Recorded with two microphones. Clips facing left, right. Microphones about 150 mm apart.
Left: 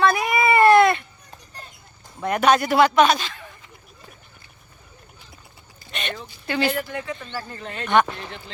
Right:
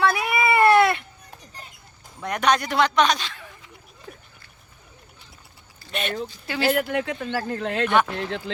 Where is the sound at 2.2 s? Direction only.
5° left (ahead or behind).